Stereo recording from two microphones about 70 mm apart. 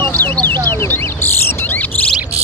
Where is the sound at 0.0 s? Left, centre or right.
Left.